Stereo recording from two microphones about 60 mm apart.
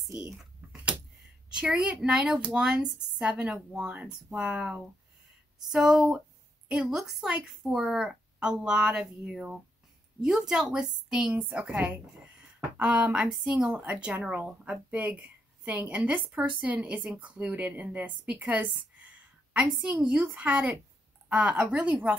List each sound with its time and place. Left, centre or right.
0.1 s speech: centre
1.5 s a woman's voice: centre
12.4 s a sound: right
13.5 s a woman's voice: right